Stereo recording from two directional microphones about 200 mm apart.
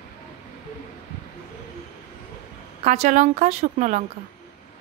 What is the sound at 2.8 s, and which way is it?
A woman's voice, 35° right (ahead or behind).